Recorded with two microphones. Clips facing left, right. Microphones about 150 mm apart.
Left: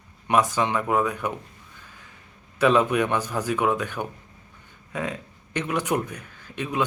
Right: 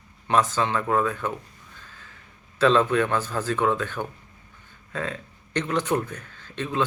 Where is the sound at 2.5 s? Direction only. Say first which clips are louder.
Even; 15° left (ahead or behind).